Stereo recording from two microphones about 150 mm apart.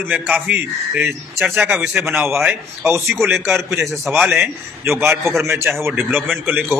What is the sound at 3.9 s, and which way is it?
Speech, centre (ahead or behind).